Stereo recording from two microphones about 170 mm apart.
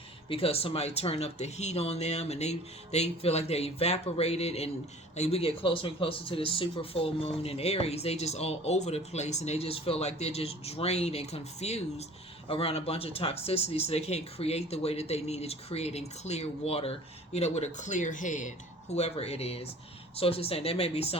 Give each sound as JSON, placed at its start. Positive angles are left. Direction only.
{"t": 0.3, "sound": "speech", "side_deg": 35}